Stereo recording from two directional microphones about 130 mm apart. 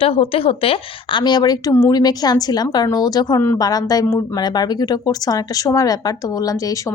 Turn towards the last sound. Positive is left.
turn(degrees=25)  # may be behind; listen again after turning